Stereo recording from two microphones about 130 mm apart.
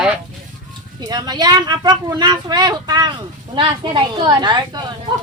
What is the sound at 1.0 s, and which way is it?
Speech, 30° right (ahead or behind).